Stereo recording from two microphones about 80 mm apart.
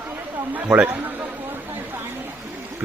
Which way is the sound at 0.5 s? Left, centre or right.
Right.